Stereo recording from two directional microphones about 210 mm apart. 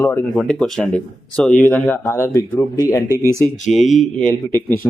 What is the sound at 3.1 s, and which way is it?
Speech, 15° right (ahead or behind).